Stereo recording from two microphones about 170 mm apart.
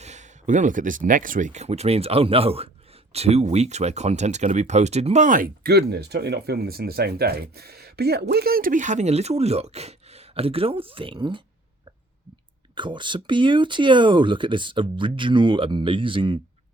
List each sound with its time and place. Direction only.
0.0 s speech: 45° right (ahead or behind); by 11.4 s 30° right (ahead or behind)
12.7 s speech: 30° right (ahead or behind)